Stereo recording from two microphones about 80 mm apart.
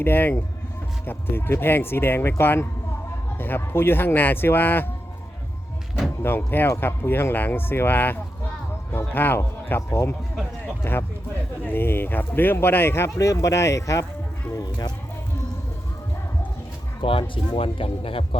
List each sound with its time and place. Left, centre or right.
0.0 s speech: left
6.2 s speech: left
13.1 s speech: left
14.5 s speech: left
17.0 s speech: left